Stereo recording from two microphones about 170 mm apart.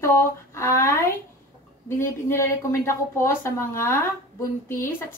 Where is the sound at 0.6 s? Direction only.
15° left (ahead or behind).